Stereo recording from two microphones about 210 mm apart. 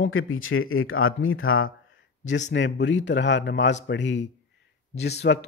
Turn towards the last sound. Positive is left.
turn(degrees=55)  # may be behind; listen again after turning